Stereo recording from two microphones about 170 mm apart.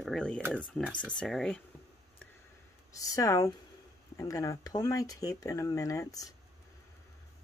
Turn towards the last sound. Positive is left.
turn(degrees=20)  # may be behind; listen again after turning